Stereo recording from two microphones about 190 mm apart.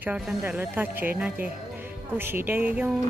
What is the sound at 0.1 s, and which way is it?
Speech, 10° right (ahead or behind).